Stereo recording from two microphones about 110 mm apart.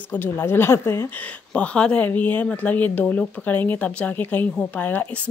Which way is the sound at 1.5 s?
10° left (ahead or behind).